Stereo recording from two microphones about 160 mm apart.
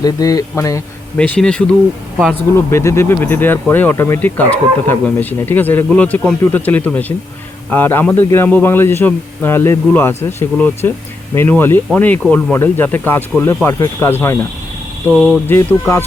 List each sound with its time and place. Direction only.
0.0 s speech: 25° left (ahead or behind)
1.1 s speech: 10° left (ahead or behind)
2.6 s speech: 15° left (ahead or behind)
15.1 s speech: centre (ahead or behind)
15.4 s speech: 15° left (ahead or behind)